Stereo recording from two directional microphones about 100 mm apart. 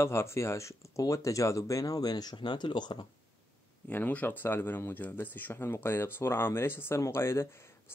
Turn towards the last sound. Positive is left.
turn(degrees=25)  # may be behind; listen again after turning